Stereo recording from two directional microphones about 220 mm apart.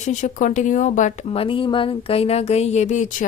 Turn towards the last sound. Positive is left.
turn(degrees=35)  # may be behind; listen again after turning